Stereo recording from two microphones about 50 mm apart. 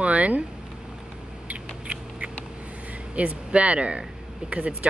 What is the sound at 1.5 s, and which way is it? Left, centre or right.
Rodents, right.